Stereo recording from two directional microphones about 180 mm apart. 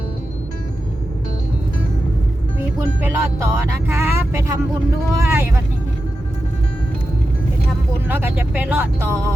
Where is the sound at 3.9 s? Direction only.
15° right (ahead or behind).